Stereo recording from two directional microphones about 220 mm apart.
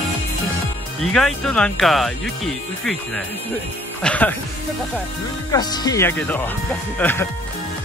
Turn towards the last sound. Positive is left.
turn(degrees=10)  # may be behind; listen again after turning